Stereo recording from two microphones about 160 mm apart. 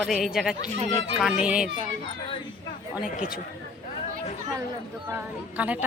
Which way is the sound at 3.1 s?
60° left (ahead or behind).